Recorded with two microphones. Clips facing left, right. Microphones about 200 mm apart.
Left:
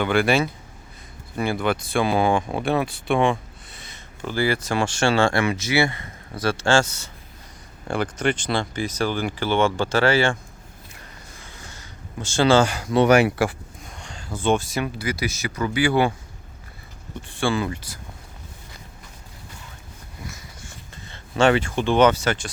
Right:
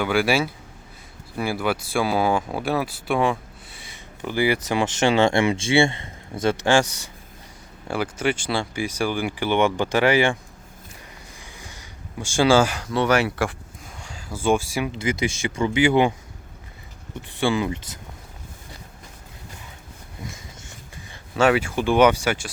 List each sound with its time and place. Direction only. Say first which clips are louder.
0.0 s speech: left 1 dB; 5° right (ahead or behind)
11.3 s a sound: even; 15° right (ahead or behind)
12.8 s speech: left 4 dB; 20° left (ahead or behind)
13.8 s a sound: even; 5° right (ahead or behind)
14.9 s speech: right 2 dB; 25° right (ahead or behind)
17.2 s speech: right 1 dB; 15° right (ahead or behind)
21.1 s speech: left 1 dB; 5° right (ahead or behind)